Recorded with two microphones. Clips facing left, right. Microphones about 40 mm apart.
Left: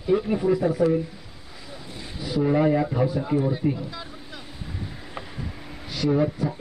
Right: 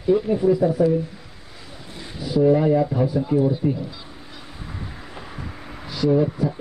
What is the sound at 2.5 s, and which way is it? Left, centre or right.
Speech, left.